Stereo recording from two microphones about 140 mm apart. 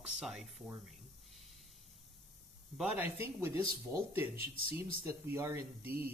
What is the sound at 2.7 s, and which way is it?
Speech, 15° right (ahead or behind).